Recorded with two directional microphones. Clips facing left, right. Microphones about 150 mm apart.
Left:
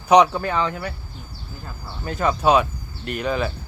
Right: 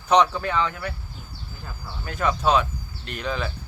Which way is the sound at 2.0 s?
25° left (ahead or behind).